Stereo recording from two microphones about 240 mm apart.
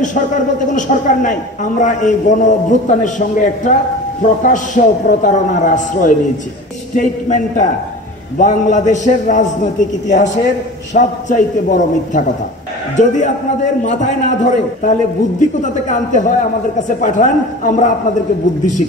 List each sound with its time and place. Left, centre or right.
0.7 s a man's voice: left